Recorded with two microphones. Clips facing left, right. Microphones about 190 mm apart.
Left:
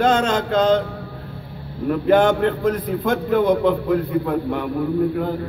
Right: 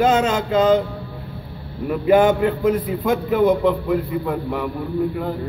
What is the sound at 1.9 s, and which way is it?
A man's voice, 5° right (ahead or behind).